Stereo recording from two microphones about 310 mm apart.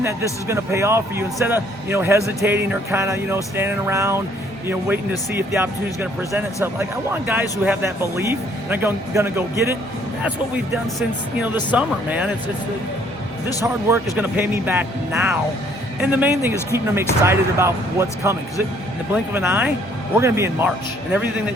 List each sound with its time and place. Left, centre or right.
0.0 s speech: centre
11.7 s speech: centre
13.9 s speech: centre